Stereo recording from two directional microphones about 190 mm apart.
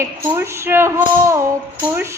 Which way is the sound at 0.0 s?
15° right (ahead or behind).